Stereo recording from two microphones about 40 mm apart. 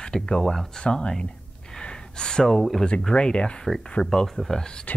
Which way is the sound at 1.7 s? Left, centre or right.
Left.